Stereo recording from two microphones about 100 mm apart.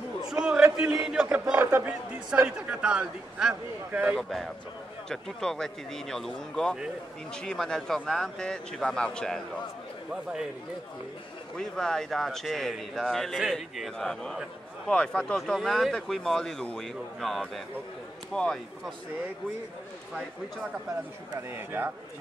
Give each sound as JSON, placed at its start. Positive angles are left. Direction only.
{"t": 0.2, "sound": "a sound", "side_deg": -5}
{"t": 1.0, "sound": "speech", "side_deg": -10}
{"t": 1.6, "sound": "a man's voice", "side_deg": -20}
{"t": 11.5, "sound": "a man's voice", "side_deg": 5}
{"t": 21.4, "sound": "a man's voice", "side_deg": -25}